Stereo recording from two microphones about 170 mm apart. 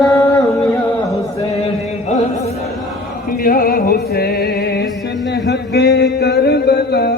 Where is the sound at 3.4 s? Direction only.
60° left (ahead or behind).